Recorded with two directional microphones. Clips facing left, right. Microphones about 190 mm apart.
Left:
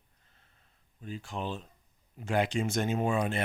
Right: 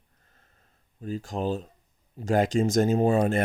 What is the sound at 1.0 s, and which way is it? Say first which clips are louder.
Speech: right 7 dB; 40° right (ahead or behind).